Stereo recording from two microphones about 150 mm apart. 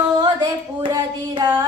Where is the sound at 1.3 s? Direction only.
25° right (ahead or behind).